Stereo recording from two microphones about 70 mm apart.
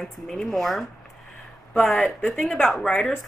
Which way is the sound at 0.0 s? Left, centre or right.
Centre.